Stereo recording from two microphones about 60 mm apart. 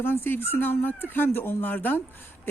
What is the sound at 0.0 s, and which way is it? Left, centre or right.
Speech, left.